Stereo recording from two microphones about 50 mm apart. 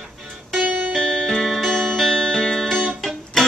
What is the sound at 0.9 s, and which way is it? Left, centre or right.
Music, centre.